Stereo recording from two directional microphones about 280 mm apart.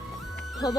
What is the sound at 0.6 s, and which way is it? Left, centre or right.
Speech, centre.